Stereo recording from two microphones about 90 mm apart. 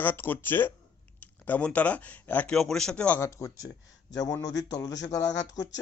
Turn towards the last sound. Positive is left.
turn(degrees=40)  # may be behind; listen again after turning